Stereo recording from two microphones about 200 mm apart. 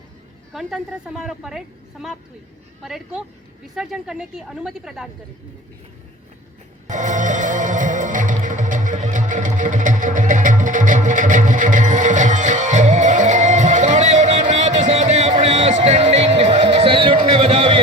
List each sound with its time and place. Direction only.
0.5 s a woman's voice: centre (ahead or behind)
6.8 s music: 40° right (ahead or behind)